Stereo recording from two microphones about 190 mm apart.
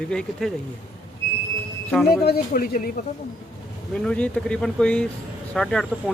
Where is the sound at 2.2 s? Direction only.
55° left (ahead or behind).